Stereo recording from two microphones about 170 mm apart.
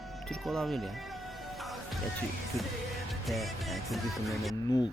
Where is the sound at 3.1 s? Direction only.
Centre (ahead or behind).